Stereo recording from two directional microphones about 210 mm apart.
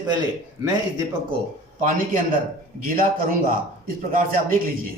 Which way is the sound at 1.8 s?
40° right (ahead or behind).